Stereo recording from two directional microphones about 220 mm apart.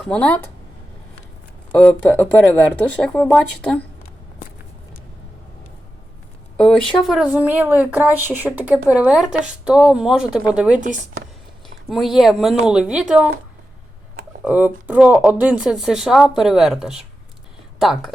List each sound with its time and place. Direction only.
0.0 s speech: 5° left (ahead or behind)
1.7 s a woman's voice: 5° left (ahead or behind)
6.6 s a woman's voice: 5° left (ahead or behind)
10.8 s speech: 35° right (ahead or behind)
11.9 s a woman's voice: centre (ahead or behind)
14.4 s a woman's voice: 5° right (ahead or behind)